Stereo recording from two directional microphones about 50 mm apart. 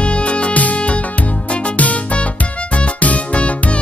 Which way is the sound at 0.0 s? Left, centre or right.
Left.